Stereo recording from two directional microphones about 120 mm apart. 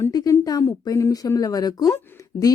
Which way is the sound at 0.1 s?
30° left (ahead or behind).